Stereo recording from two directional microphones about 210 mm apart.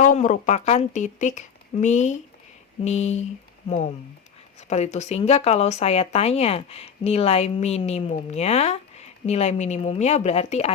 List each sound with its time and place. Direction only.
0.0 s speech: 35° left (ahead or behind)
4.7 s speech: 35° left (ahead or behind)